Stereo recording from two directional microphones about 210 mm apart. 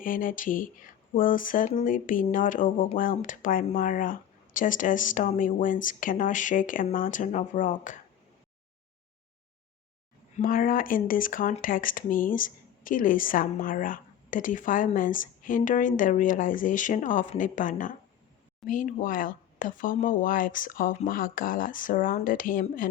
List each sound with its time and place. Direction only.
0.0 s speech: 40° left (ahead or behind)
10.3 s speech: 40° left (ahead or behind)